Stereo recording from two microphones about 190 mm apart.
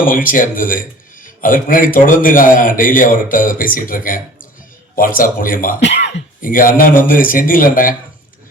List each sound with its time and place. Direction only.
0.3 s speech: 45° left (ahead or behind)
5.8 s speech: 70° left (ahead or behind)
6.4 s speech: 45° left (ahead or behind)